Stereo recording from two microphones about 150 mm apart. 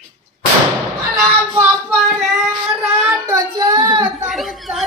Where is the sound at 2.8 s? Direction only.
15° right (ahead or behind).